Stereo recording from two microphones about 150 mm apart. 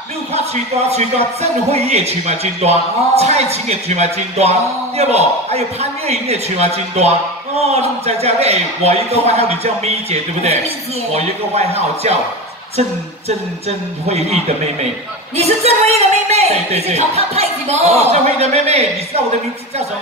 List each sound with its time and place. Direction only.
0.8 s a man's voice: 45° right (ahead or behind)
13.7 s a man's voice: 45° right (ahead or behind)
15.3 s a man's voice: 45° right (ahead or behind)